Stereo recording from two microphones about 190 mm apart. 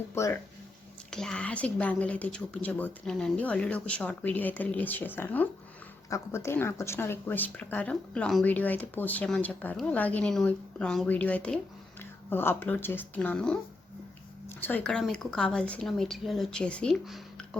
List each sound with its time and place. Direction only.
0.1 s speech: 15° left (ahead or behind)
1.1 s speech: 5° left (ahead or behind)
14.6 s a woman's voice: 10° left (ahead or behind)